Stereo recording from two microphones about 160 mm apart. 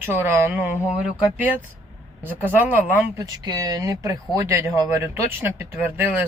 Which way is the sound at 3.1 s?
20° right (ahead or behind).